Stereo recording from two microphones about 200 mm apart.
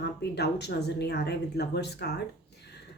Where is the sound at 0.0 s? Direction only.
55° left (ahead or behind).